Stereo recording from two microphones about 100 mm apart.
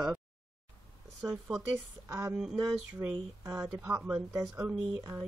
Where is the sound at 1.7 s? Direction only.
30° right (ahead or behind).